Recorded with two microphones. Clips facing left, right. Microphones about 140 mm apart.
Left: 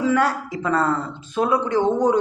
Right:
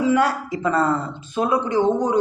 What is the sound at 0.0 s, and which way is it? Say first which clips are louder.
A man's voice: right 1 dB; 10° right (ahead or behind).